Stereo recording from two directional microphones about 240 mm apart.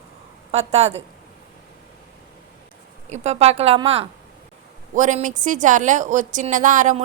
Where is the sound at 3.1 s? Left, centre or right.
Right.